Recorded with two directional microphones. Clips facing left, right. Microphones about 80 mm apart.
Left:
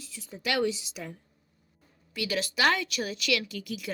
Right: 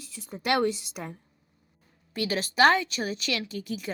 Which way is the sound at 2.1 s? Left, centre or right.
Right.